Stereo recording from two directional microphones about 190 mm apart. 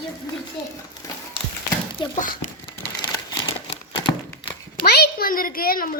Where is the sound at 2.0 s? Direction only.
25° left (ahead or behind).